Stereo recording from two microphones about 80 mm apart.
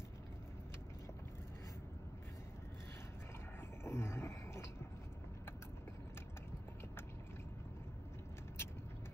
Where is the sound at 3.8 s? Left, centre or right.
Left.